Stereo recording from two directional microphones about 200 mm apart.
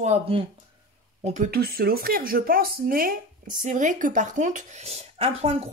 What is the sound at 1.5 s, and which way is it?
Speech, 50° right (ahead or behind).